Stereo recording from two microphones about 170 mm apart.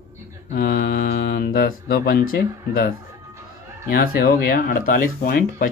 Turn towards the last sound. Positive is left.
turn(degrees=55)  # may be behind; listen again after turning